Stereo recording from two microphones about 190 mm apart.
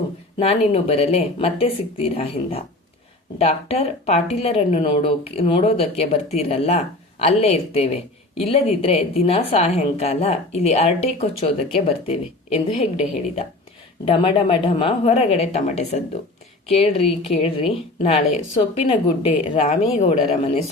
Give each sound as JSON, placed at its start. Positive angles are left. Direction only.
{"t": 0.3, "sound": "a woman's voice", "side_deg": 30}